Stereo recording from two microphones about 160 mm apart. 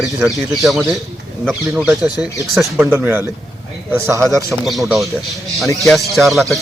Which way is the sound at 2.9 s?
15° right (ahead or behind).